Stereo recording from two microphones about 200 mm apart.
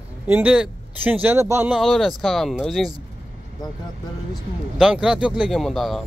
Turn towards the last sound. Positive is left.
turn(degrees=0)  # may be behind; listen again after turning